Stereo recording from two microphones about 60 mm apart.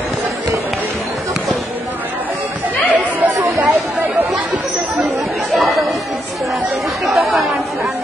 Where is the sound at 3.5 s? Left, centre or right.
Centre.